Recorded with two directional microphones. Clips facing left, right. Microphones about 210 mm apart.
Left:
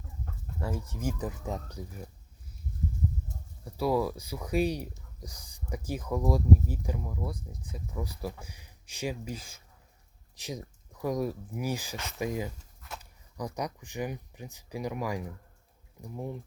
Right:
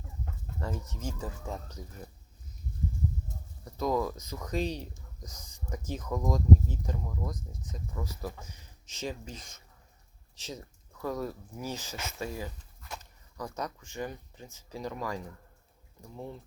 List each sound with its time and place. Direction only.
0.6 s speech: 10° left (ahead or behind)
3.6 s speech: 10° left (ahead or behind)
12.8 s a sound: centre (ahead or behind)
13.3 s speech: 15° left (ahead or behind)